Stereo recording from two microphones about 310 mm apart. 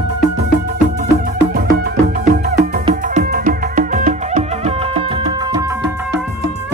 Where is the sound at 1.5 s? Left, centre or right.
Right; by 5.8 s centre.